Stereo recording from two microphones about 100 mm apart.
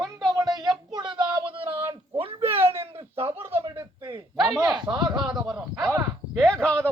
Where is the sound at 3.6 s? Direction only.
40° right (ahead or behind).